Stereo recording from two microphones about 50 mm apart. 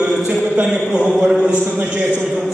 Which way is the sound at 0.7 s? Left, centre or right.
Centre.